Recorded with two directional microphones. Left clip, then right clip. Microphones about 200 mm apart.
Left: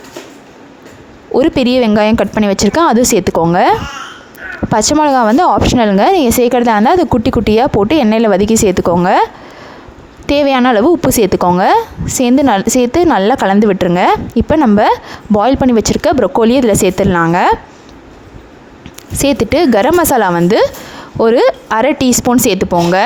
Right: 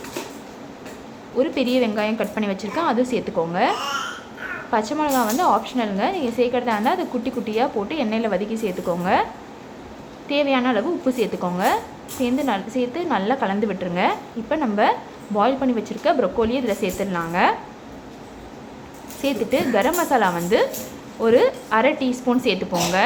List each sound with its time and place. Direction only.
1.4 s speech: 60° left (ahead or behind)
10.2 s speech: 55° left (ahead or behind)
19.2 s speech: 55° left (ahead or behind)